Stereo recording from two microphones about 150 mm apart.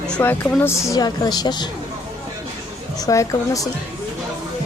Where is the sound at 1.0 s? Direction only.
25° left (ahead or behind).